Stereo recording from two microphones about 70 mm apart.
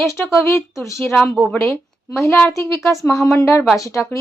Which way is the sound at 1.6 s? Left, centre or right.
Left.